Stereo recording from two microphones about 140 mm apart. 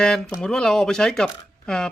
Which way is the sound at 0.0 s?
5° left (ahead or behind).